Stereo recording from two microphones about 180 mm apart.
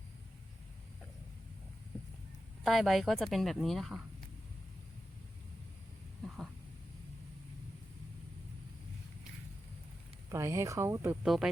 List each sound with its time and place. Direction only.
2.6 s speech: centre (ahead or behind)
6.2 s a sound: 5° right (ahead or behind)
10.2 s speech: 15° right (ahead or behind)
11.2 s speech: 5° right (ahead or behind)